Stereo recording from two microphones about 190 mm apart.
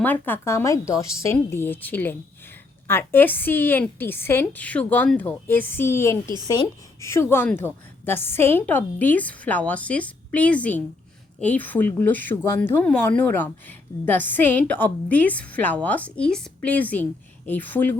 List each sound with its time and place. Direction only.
0.0 s speech: 10° left (ahead or behind)